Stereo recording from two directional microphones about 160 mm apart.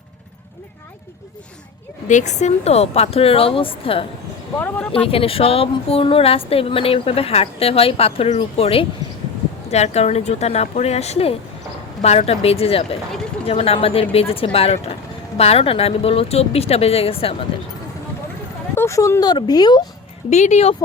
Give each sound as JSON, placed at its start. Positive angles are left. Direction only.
{"t": 2.0, "sound": "a woman's voice", "side_deg": 50}
{"t": 4.5, "sound": "speech", "side_deg": 10}
{"t": 4.9, "sound": "a woman's voice", "side_deg": 35}
{"t": 18.7, "sound": "speech", "side_deg": 15}
{"t": 20.3, "sound": "speech", "side_deg": 45}